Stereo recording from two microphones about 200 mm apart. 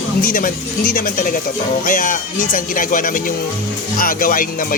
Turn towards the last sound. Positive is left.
turn(degrees=45)  # may be behind; listen again after turning